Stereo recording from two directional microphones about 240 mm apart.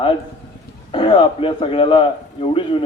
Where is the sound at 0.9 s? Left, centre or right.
Left.